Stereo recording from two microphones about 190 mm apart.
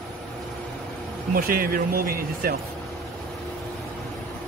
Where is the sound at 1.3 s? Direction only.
50° right (ahead or behind).